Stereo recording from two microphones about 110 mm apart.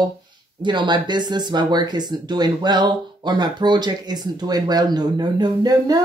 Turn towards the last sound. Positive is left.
turn(degrees=-35)  # may be behind; listen again after turning